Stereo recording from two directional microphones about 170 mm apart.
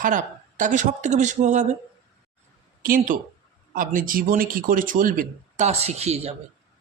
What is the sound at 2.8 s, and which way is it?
A man's voice, 55° right (ahead or behind).